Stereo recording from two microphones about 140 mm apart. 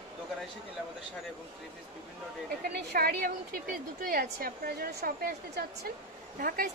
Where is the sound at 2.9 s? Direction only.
90° right.